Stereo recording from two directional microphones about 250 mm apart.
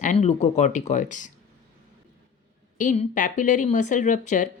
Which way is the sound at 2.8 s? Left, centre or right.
Left.